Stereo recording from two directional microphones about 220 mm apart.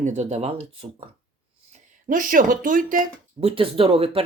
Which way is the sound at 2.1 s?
40° right (ahead or behind).